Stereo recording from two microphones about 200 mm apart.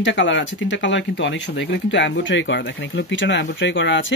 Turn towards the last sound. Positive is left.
turn(degrees=65)  # may be behind; listen again after turning